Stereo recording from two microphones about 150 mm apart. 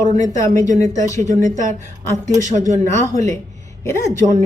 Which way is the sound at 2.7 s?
20° left (ahead or behind).